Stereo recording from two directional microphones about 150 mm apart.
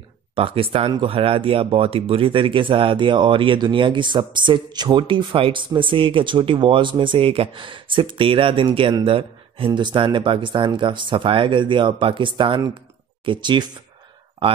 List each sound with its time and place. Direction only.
0.4 s speech: 40° right (ahead or behind)